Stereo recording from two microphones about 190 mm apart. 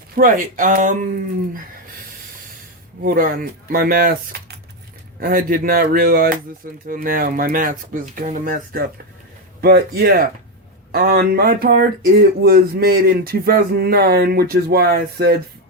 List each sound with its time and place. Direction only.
0.2 s speech: 45° right (ahead or behind)
3.0 s a man's voice: 50° right (ahead or behind)